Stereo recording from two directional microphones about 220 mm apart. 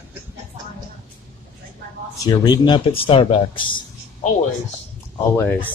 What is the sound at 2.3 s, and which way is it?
Speech, 20° left (ahead or behind).